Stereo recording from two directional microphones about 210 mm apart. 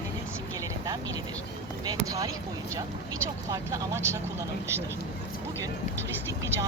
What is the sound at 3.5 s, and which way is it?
Speech, 15° right (ahead or behind).